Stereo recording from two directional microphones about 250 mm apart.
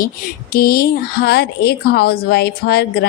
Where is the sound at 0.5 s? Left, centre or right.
Left.